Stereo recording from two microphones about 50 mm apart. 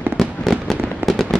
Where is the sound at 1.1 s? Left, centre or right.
Centre.